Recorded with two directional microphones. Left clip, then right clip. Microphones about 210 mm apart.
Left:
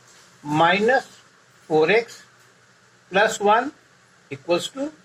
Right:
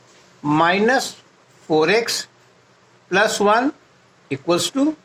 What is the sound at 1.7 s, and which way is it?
Speech, 50° right (ahead or behind).